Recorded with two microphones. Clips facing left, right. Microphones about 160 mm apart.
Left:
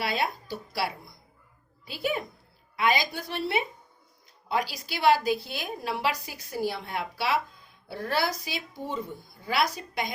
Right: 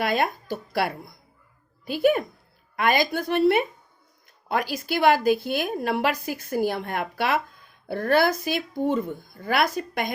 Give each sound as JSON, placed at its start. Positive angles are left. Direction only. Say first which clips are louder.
{"t": 0.0, "sound": "a woman's voice", "louder": "right 5 dB", "side_deg": -50}